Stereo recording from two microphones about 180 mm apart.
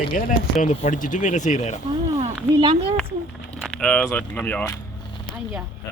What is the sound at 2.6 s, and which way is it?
Speech, 30° right (ahead or behind).